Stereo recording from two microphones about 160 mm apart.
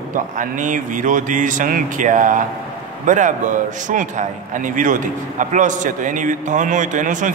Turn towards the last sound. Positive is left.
turn(degrees=-50)  # may be behind; listen again after turning